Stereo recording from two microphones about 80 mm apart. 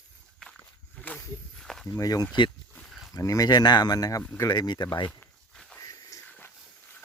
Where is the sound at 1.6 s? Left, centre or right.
Centre.